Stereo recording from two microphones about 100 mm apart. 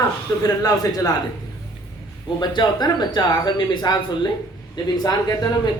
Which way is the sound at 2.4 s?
50° left (ahead or behind).